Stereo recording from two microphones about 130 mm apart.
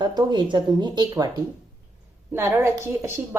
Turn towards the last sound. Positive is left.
turn(degrees=-20)  # may be behind; listen again after turning